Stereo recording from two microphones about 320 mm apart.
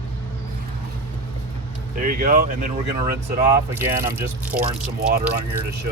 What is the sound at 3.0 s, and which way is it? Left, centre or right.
Speech, centre.